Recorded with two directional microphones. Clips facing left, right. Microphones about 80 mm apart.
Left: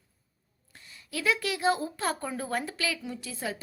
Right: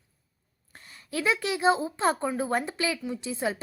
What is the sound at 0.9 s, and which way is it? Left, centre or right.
A woman's voice, right.